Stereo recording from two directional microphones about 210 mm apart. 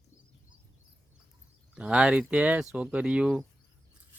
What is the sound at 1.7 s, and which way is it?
Speech, 5° right (ahead or behind).